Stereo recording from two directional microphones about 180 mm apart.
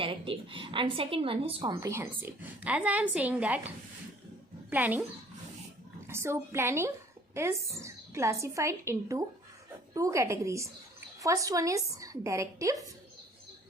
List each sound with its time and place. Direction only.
0.0 s a woman's voice: 30° right (ahead or behind)
1.7 s a woman's voice: 15° right (ahead or behind)
4.7 s a woman's voice: 10° right (ahead or behind)
6.1 s a woman's voice: 15° right (ahead or behind)